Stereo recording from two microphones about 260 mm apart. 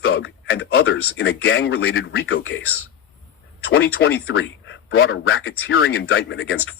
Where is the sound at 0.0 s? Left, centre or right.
Left.